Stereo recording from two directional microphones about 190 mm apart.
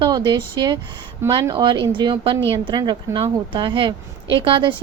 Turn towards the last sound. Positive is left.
turn(degrees=-25)  # may be behind; listen again after turning